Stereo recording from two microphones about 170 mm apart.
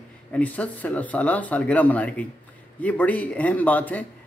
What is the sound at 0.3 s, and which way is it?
Speech, 10° left (ahead or behind).